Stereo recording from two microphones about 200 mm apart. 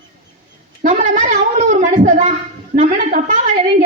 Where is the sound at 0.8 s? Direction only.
40° right (ahead or behind).